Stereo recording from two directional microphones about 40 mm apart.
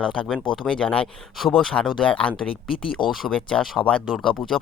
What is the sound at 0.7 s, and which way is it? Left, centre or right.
Speech, left.